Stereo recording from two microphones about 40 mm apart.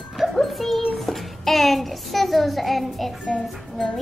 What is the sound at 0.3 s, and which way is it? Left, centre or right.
Child singing, centre.